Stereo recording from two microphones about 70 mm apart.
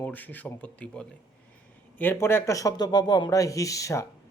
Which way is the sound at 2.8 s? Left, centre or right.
Left.